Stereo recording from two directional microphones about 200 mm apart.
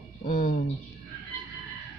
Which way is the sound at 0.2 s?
45° left (ahead or behind).